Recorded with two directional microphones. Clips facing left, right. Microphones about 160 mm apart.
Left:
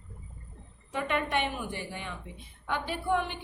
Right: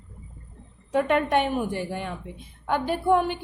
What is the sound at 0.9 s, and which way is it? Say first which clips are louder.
A woman's voice: right 8 dB; 50° right (ahead or behind).